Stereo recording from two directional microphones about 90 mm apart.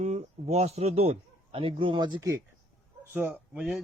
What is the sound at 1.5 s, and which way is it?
Speech, 80° right.